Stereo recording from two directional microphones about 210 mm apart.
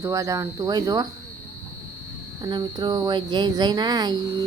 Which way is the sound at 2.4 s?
20° right (ahead or behind).